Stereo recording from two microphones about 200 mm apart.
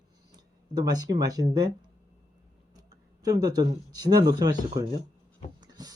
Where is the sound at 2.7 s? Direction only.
20° right (ahead or behind).